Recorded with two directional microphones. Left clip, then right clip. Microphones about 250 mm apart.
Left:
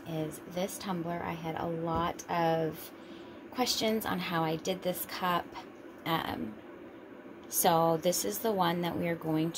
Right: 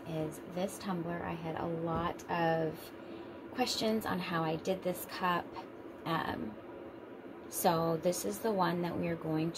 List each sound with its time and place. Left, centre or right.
0.6 s a woman's voice: left
7.6 s a woman's voice: left